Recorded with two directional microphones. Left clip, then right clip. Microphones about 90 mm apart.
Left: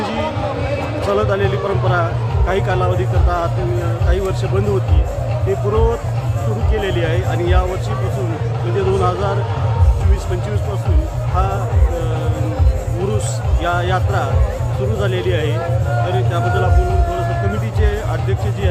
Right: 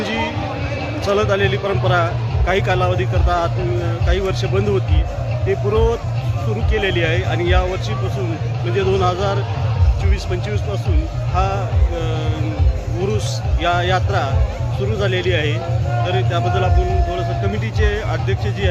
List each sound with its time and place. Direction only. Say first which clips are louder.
1.0 s a man's voice: right 1 dB; 10° right (ahead or behind)
8.7 s speech: even; 5° right (ahead or behind)
11.3 s speech: right 1 dB; 5° right (ahead or behind)
13.6 s speech: right 1 dB; 5° right (ahead or behind)
17.7 s speech: right 1 dB; centre (ahead or behind)